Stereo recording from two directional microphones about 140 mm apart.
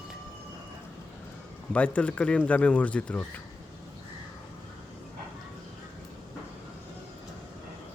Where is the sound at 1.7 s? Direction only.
10° left (ahead or behind).